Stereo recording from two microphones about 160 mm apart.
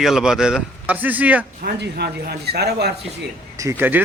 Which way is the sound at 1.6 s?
80° right.